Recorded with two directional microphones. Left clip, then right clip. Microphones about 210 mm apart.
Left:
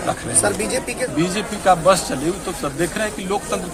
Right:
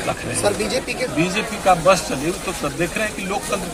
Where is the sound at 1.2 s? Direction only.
15° left (ahead or behind).